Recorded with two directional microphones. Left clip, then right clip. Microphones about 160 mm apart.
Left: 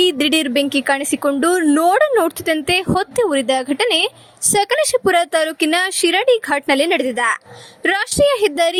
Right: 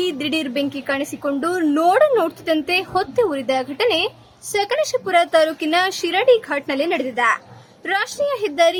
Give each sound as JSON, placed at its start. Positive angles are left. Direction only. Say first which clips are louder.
{"t": 0.0, "sound": "a woman's voice", "louder": "left 7 dB", "side_deg": 40}